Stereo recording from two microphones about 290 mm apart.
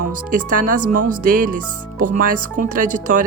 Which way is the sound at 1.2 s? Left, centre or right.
Right.